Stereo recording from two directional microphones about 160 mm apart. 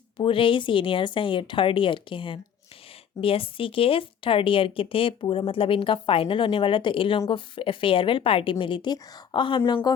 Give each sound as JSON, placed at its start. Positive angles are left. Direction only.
{"t": 0.2, "sound": "speech", "side_deg": 35}